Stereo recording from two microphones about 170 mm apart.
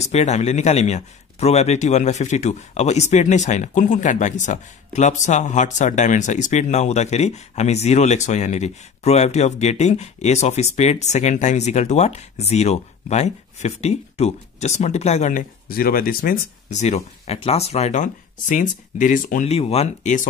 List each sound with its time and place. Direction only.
0.0 s speech: 40° left (ahead or behind)
15.7 s speech: 60° left (ahead or behind)
16.8 s speech: 40° left (ahead or behind)